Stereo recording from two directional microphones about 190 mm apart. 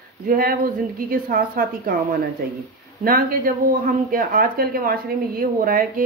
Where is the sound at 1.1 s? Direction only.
50° right (ahead or behind).